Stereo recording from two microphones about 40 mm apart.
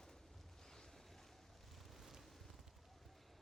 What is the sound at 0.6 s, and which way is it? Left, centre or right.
Boat, centre.